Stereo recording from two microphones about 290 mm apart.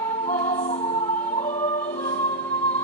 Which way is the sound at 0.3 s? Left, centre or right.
Left.